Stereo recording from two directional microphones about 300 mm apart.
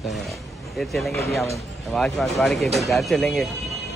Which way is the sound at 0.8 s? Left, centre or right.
Centre.